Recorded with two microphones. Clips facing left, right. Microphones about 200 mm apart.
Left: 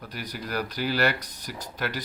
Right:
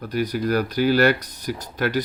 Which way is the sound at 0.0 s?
50° right (ahead or behind).